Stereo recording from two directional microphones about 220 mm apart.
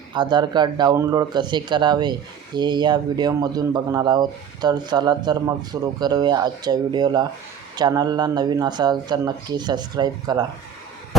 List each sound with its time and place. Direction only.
0.1 s a man's voice: 20° right (ahead or behind)